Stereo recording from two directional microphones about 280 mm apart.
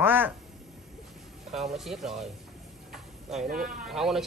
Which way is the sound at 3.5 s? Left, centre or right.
Right.